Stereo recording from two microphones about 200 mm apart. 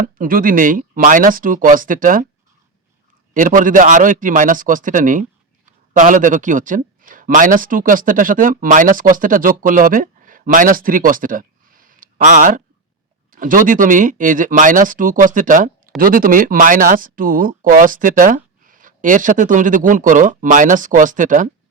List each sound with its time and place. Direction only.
0.0 s speech: 45° right (ahead or behind)
3.3 s speech: 40° right (ahead or behind)